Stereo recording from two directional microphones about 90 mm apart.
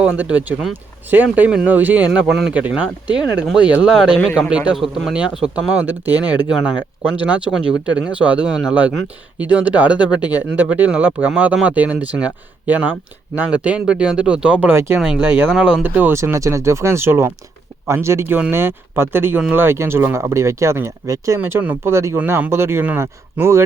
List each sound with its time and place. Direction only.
0.0 s speech: 15° right (ahead or behind)
14.7 s speech: 25° right (ahead or behind)